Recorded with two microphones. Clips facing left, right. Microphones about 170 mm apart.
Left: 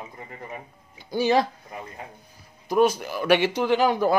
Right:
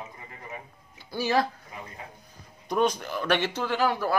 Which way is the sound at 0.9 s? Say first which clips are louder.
Left 4 dB; 20° left (ahead or behind).